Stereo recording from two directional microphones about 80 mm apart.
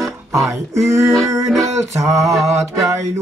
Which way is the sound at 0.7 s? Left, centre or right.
Right.